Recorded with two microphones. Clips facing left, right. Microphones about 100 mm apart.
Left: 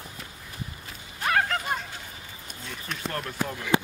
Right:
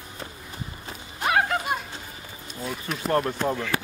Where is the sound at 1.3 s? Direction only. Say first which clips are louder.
Right 2 dB; 15° right (ahead or behind).